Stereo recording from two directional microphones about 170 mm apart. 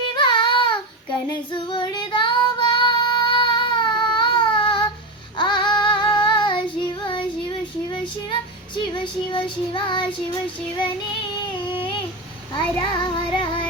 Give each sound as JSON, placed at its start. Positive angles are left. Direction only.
{"t": 0.2, "sound": "child singing", "side_deg": 30}
{"t": 1.8, "sound": "female singing", "side_deg": 30}
{"t": 5.4, "sound": "child singing", "side_deg": 30}
{"t": 7.9, "sound": "female singing", "side_deg": 30}
{"t": 9.3, "sound": "child singing", "side_deg": 30}
{"t": 11.7, "sound": "a sound", "side_deg": 30}
{"t": 12.9, "sound": "female singing", "side_deg": 30}